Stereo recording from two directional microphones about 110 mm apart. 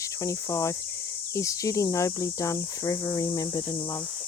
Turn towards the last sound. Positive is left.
turn(degrees=30)  # may be behind; listen again after turning